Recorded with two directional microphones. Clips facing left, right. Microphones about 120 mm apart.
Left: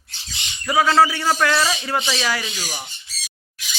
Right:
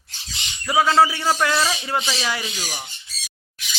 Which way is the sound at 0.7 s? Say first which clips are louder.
Left 1 dB; 20° right (ahead or behind).